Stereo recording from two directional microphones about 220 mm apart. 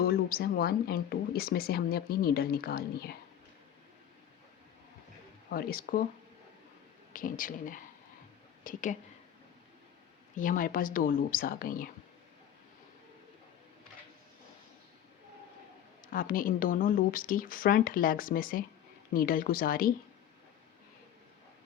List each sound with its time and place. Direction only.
0.0 s speech: 45° left (ahead or behind)
5.5 s speech: 45° left (ahead or behind)
7.1 s speech: 40° left (ahead or behind)
10.3 s speech: 35° left (ahead or behind)
16.0 s speech: 40° left (ahead or behind)